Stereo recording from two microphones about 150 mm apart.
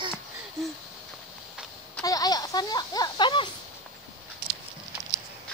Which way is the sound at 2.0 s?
25° left (ahead or behind).